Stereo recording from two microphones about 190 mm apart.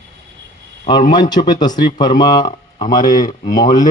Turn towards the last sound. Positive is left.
turn(degrees=20)  # may be behind; listen again after turning